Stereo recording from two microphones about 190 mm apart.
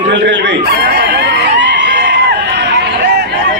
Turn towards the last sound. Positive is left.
turn(degrees=-60)  # may be behind; listen again after turning